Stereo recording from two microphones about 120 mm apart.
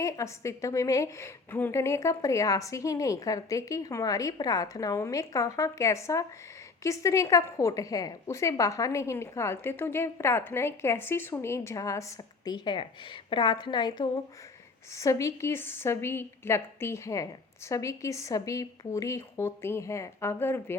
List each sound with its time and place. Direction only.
0.0 s a woman's voice: 25° left (ahead or behind)
12.5 s a woman's voice: 40° left (ahead or behind)
14.9 s a woman's voice: 25° left (ahead or behind)